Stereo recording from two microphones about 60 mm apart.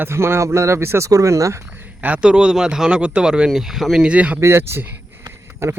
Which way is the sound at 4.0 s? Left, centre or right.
Right.